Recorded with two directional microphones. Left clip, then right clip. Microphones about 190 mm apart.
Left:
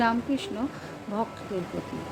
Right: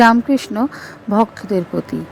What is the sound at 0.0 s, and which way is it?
Speech, 45° right (ahead or behind).